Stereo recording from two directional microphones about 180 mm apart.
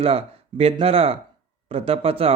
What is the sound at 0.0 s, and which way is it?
A man's voice, 30° right (ahead or behind).